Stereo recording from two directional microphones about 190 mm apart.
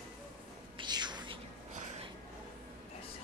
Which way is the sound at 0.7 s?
25° right (ahead or behind).